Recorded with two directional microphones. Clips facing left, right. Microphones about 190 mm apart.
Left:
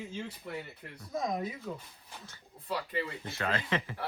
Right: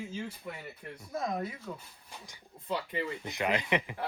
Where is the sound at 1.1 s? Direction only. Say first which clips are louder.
Left 1 dB; 15° left (ahead or behind).